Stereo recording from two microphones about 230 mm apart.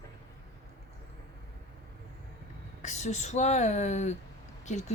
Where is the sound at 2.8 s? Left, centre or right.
Left.